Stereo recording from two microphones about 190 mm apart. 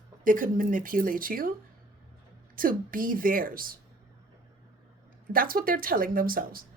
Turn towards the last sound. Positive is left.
turn(degrees=-50)  # may be behind; listen again after turning